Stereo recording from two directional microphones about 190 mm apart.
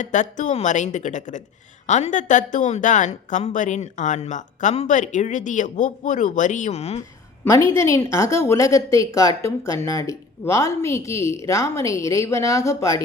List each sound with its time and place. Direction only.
0.0 s a woman's voice: 40° left (ahead or behind)
7.4 s a woman's voice: 15° left (ahead or behind)